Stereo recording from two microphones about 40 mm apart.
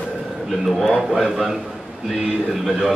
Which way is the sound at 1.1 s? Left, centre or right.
Centre.